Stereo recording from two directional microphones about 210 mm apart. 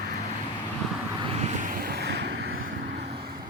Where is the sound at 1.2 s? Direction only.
30° right (ahead or behind); by 3.0 s 55° right (ahead or behind).